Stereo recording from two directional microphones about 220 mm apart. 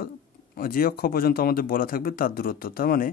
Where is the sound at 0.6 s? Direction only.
40° left (ahead or behind).